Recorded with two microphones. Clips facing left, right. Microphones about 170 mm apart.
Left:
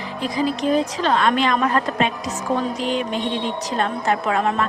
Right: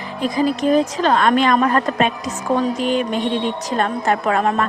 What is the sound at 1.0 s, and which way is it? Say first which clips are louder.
A woman's voice: right 3 dB; 50° right (ahead or behind).